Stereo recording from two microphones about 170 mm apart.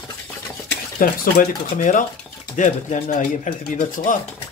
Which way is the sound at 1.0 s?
50° left (ahead or behind).